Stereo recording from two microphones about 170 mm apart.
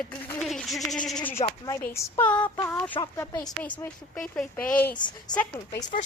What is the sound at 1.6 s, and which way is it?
Speech, 15° left (ahead or behind).